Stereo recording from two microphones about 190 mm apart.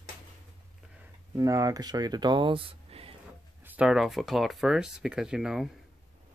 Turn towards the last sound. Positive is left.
turn(degrees=-5)  # may be behind; listen again after turning